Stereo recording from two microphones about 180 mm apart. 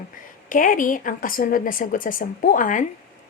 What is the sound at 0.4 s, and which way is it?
A woman's voice, 50° left (ahead or behind).